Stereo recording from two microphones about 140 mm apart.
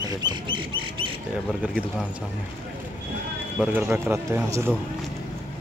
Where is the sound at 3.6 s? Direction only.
10° right (ahead or behind).